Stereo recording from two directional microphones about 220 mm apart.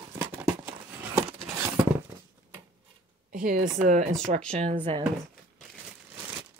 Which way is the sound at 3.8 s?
35° right (ahead or behind).